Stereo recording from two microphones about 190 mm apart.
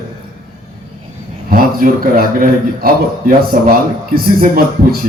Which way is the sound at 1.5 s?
50° right (ahead or behind).